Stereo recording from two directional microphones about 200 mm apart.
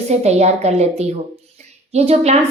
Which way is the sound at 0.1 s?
35° right (ahead or behind).